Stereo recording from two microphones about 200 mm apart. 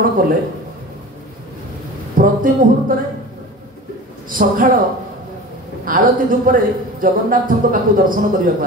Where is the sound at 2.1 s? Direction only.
45° right (ahead or behind).